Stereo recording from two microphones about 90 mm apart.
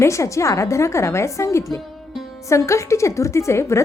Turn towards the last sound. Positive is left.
turn(degrees=30)  # may be behind; listen again after turning